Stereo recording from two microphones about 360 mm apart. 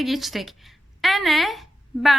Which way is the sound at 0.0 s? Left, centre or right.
Centre.